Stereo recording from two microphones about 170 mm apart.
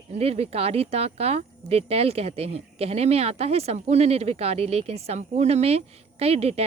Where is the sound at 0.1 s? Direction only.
35° right (ahead or behind).